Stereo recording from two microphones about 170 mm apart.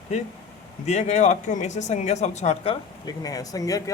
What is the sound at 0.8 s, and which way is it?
Speech, 40° left (ahead or behind).